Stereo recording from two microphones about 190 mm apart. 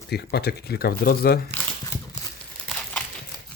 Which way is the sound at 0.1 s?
60° left (ahead or behind).